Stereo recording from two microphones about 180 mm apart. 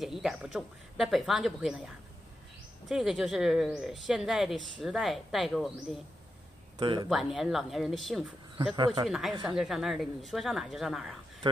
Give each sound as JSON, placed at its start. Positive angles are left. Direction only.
{"t": 0.0, "sound": "speech", "side_deg": 0}
{"t": 2.9, "sound": "speech", "side_deg": 0}
{"t": 6.8, "sound": "speech", "side_deg": -25}
{"t": 7.1, "sound": "speech", "side_deg": 0}
{"t": 8.7, "sound": "speech", "side_deg": -25}
{"t": 9.0, "sound": "speech", "side_deg": -5}